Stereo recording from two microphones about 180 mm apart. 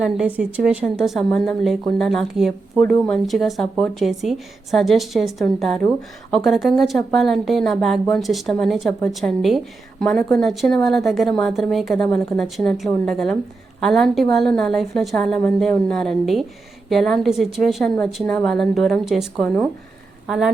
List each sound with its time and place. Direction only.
0.0 s a woman's voice: 5° right (ahead or behind)